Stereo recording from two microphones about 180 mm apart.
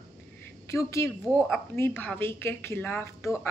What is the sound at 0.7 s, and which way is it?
A woman's voice, 15° left (ahead or behind).